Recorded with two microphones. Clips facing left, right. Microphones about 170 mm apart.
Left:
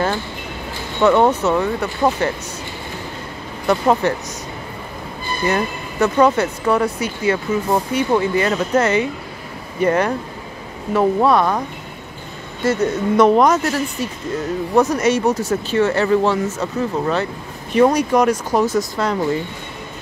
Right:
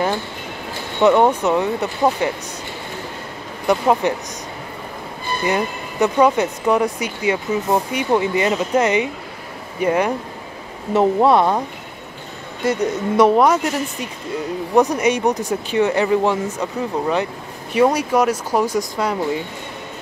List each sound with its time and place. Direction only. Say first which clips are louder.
1.0 s speech: even; 10° right (ahead or behind)
3.8 s speech: left 1 dB; 10° right (ahead or behind)
5.5 s speech: even; 15° right (ahead or behind)
10.9 s speech: right 1 dB; 25° right (ahead or behind)
12.6 s speech: left 2 dB; 15° right (ahead or behind)